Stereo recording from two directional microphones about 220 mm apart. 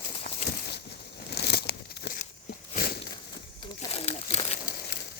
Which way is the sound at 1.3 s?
50° left (ahead or behind).